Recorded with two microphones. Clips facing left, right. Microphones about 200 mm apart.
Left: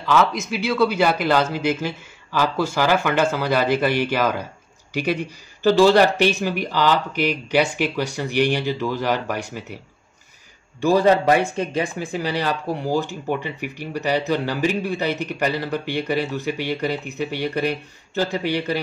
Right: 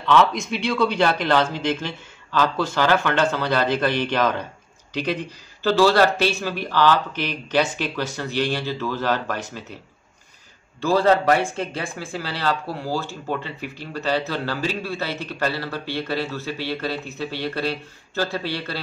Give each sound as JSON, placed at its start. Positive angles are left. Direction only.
{"t": 0.0, "sound": "speech", "side_deg": 0}
{"t": 5.6, "sound": "speech", "side_deg": 15}
{"t": 10.8, "sound": "speech", "side_deg": 15}